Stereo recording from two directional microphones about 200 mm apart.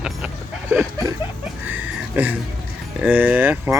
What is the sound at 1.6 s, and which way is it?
Music, 10° right (ahead or behind).